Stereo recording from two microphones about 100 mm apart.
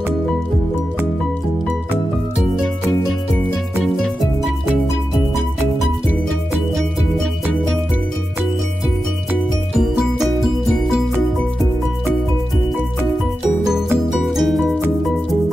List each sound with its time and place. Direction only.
3.8 s music: centre (ahead or behind)
9.8 s music: 5° right (ahead or behind)
14.0 s music: 5° right (ahead or behind)